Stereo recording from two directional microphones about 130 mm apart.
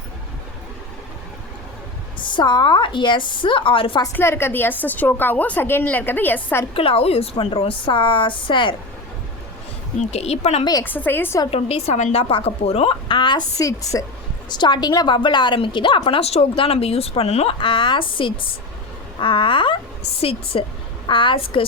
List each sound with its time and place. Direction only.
2.2 s a woman's voice: 35° left (ahead or behind)
4.1 s a woman's voice: 20° left (ahead or behind)
6.7 s a woman's voice: 45° left (ahead or behind)
10.0 s a woman's voice: 55° left (ahead or behind)
10.8 s a woman's voice: 15° left (ahead or behind)
11.5 s a woman's voice: 50° left (ahead or behind)
17.6 s a woman's voice: 40° left (ahead or behind)
19.2 s a woman's voice: 40° left (ahead or behind)